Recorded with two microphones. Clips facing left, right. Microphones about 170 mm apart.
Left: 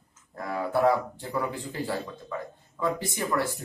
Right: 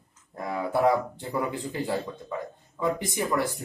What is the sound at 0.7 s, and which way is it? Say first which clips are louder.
Speech: even; 20° right (ahead or behind).